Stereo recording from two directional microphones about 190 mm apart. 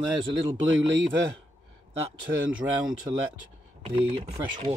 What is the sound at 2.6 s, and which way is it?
Speech, 5° right (ahead or behind).